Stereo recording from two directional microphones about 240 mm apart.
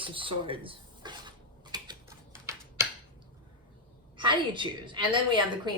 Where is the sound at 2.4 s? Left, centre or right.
Centre.